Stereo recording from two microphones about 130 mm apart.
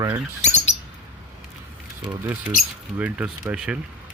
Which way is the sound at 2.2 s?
15° right (ahead or behind).